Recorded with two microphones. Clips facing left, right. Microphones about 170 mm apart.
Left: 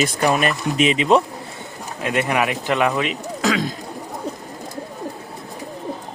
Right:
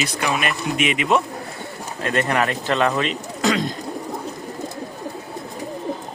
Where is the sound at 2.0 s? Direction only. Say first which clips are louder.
Even; 10° left (ahead or behind).